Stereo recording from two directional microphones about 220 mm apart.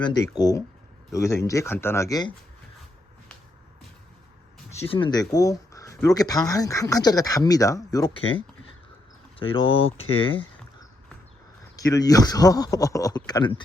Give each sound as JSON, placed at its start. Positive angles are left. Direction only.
{"t": 0.0, "sound": "speech", "side_deg": 15}
{"t": 4.7, "sound": "speech", "side_deg": 25}
{"t": 9.4, "sound": "speech", "side_deg": 25}
{"t": 11.8, "sound": "speech", "side_deg": 15}